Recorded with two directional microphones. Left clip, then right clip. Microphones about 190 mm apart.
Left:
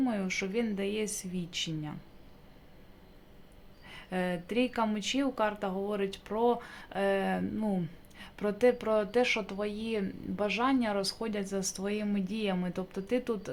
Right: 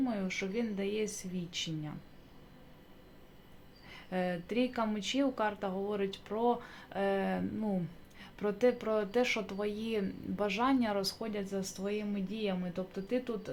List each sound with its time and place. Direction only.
0.0 s speech: 15° left (ahead or behind)
3.8 s speech: 15° left (ahead or behind)